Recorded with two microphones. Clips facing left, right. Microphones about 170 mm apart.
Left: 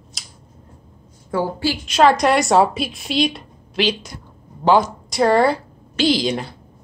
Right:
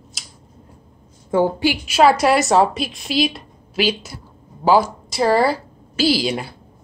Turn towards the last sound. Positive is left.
turn(degrees=-10)  # may be behind; listen again after turning